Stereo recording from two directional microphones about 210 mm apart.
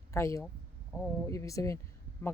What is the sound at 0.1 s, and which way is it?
Speech, 15° left (ahead or behind).